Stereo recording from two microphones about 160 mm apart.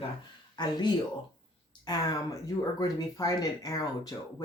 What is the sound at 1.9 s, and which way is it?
Speech, 25° left (ahead or behind).